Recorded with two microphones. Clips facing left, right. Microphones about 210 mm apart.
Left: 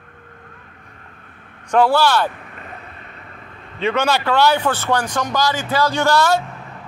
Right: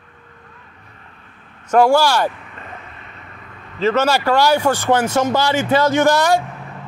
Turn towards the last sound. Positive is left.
turn(degrees=-15)  # may be behind; listen again after turning